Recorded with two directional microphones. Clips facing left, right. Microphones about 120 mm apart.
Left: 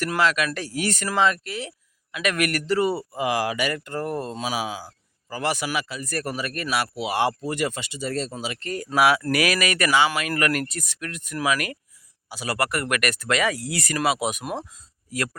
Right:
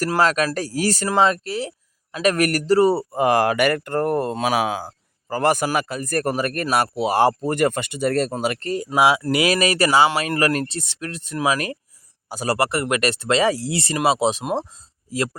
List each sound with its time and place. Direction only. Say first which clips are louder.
0.0 s speech: right 4 dB; 40° right (ahead or behind)
8.7 s speech: right 1 dB; 20° right (ahead or behind)
12.3 s speech: right 6 dB; 45° right (ahead or behind)
12.5 s speech: right 2 dB; 25° right (ahead or behind)